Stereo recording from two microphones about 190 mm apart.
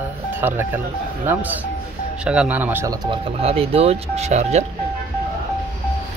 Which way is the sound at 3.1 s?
30° right (ahead or behind).